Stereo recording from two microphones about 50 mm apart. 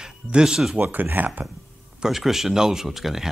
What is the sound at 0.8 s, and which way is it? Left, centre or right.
Speech, right.